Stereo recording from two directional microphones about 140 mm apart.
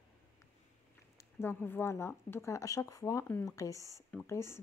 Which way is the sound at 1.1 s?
15° left (ahead or behind).